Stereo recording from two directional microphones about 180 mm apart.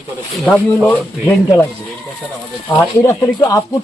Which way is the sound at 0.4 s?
15° left (ahead or behind).